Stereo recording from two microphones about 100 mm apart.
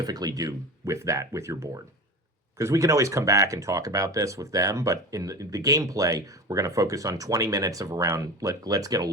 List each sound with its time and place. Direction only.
0.0 s speech: 40° right (ahead or behind)